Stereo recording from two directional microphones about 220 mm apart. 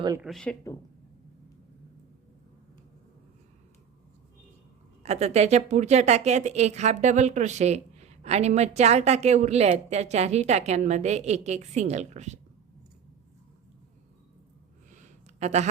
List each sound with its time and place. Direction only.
0.2 s speech: centre (ahead or behind)
5.0 s a woman's voice: 30° right (ahead or behind)
14.9 s a sound: 30° right (ahead or behind)